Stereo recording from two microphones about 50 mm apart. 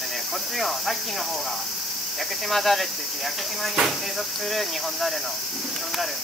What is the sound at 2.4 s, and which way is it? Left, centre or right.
Speech, centre.